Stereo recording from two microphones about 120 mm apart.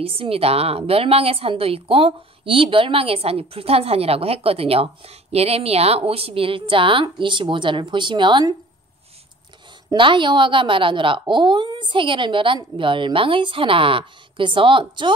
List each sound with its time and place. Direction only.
0.0 s a woman's voice: 55° right (ahead or behind)
9.8 s a woman's voice: 45° right (ahead or behind)